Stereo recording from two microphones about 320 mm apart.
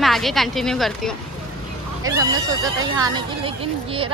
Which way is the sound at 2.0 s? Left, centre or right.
Centre.